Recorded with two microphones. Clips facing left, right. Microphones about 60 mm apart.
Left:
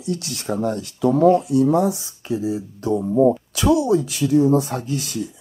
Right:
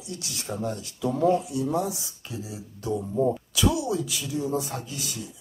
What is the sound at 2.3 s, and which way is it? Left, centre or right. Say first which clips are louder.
Speech: left 14 dB; left.